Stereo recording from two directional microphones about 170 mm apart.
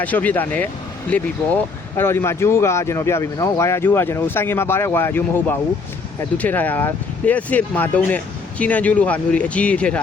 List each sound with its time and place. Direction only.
0.0 s speech: 10° left (ahead or behind)